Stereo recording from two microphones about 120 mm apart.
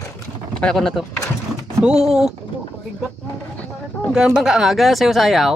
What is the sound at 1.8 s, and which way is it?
Speech, 5° right (ahead or behind).